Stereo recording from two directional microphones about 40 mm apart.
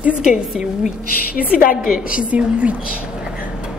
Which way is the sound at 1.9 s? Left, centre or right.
Right.